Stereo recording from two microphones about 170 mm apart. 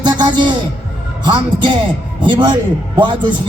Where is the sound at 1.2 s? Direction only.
25° right (ahead or behind).